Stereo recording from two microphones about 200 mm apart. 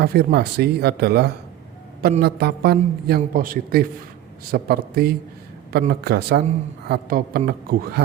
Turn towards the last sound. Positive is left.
turn(degrees=-45)  # may be behind; listen again after turning